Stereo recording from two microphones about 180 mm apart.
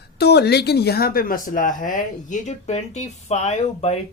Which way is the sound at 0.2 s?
65° left (ahead or behind).